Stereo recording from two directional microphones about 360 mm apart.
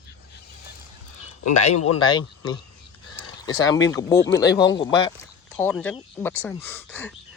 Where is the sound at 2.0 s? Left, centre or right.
Centre.